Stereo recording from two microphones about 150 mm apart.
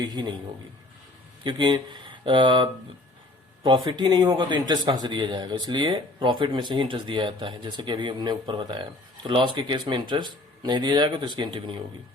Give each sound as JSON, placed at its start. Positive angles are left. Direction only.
{"t": 0.0, "sound": "a man's voice", "side_deg": -30}
{"t": 1.5, "sound": "speech", "side_deg": -30}
{"t": 3.8, "sound": "speech", "side_deg": -30}